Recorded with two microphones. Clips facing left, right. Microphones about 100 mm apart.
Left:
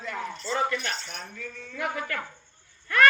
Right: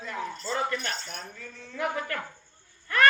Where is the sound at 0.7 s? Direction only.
40° right (ahead or behind).